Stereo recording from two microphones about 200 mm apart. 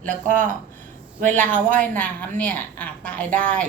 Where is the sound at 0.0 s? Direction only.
40° right (ahead or behind).